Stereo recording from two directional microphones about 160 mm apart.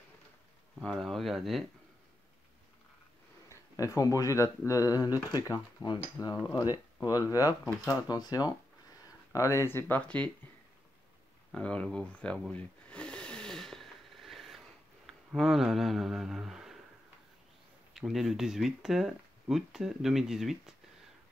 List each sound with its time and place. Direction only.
0.7 s speech: centre (ahead or behind)
3.4 s speech: 20° left (ahead or behind)
11.5 s a sound: 5° left (ahead or behind)
15.0 s speech: centre (ahead or behind)
17.9 s speech: centre (ahead or behind)